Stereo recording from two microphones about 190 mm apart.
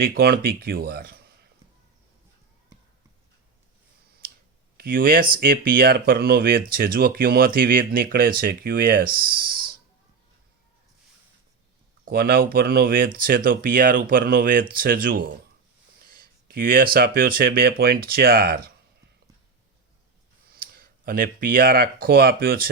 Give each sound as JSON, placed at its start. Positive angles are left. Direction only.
{"t": 0.0, "sound": "speech", "side_deg": -55}
{"t": 4.8, "sound": "speech", "side_deg": -50}
{"t": 12.0, "sound": "speech", "side_deg": -50}
{"t": 20.5, "sound": "speech", "side_deg": -50}